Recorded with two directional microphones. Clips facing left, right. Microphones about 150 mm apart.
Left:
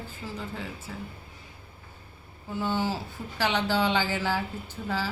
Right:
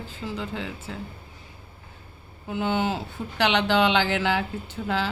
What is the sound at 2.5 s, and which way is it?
Speech, 70° right (ahead or behind).